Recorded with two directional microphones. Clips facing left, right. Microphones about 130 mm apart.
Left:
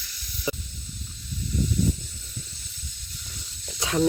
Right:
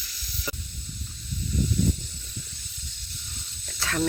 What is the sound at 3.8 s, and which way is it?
Snake, 20° left (ahead or behind).